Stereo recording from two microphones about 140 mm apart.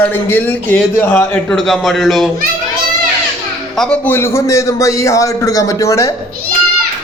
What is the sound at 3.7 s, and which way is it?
A man's voice, 5° left (ahead or behind).